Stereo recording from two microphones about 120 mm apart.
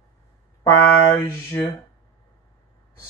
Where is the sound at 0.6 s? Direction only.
25° left (ahead or behind).